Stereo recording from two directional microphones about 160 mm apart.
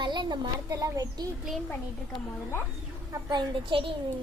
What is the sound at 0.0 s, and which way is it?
A child's voice, 30° right (ahead or behind).